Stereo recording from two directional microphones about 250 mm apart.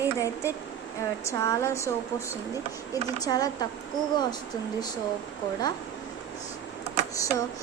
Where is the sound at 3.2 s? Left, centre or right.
Centre.